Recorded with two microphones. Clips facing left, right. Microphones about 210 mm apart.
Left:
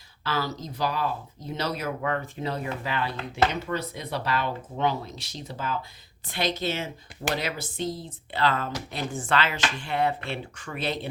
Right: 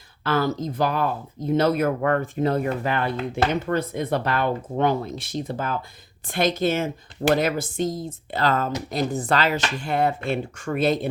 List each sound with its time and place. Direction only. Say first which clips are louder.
0.3 s speech: right 7 dB; 50° right (ahead or behind)